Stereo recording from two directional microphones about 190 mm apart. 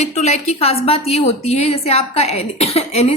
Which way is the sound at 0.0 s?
35° left (ahead or behind).